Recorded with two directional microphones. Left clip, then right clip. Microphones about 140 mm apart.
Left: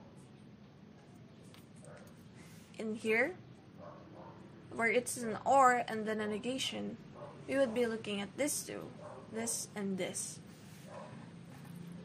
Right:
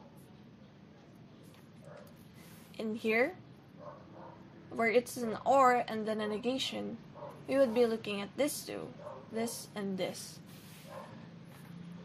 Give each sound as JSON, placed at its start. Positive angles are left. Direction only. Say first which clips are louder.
{"t": 2.8, "sound": "a woman's voice", "louder": "right 2 dB", "side_deg": -35}
{"t": 4.7, "sound": "a woman's voice", "louder": "right 3 dB", "side_deg": -35}